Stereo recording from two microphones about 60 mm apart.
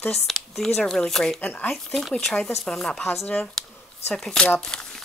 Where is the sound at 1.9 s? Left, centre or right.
Centre.